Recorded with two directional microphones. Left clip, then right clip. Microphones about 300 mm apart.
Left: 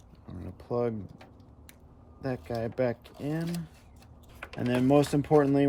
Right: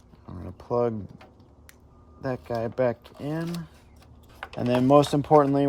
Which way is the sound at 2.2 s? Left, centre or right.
Right.